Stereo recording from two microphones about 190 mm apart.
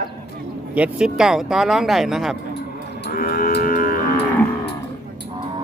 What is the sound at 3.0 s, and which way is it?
Livestock, 50° left (ahead or behind).